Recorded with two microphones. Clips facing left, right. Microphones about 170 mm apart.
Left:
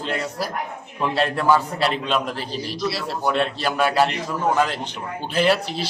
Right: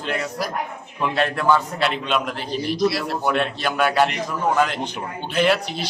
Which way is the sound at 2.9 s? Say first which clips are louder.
Right 2 dB; 25° left (ahead or behind).